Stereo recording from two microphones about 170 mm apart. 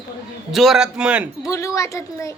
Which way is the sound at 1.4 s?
20° left (ahead or behind).